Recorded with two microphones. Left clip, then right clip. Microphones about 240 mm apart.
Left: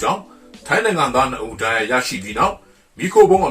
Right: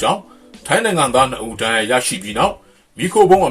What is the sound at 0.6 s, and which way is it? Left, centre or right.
Speech, right.